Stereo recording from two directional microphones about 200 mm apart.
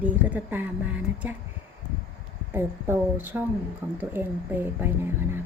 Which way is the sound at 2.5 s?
10° right (ahead or behind).